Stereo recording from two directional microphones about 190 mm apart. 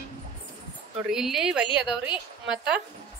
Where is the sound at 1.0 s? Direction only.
Centre (ahead or behind).